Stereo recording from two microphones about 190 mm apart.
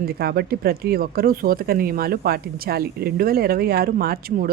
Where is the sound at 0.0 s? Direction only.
55° right (ahead or behind).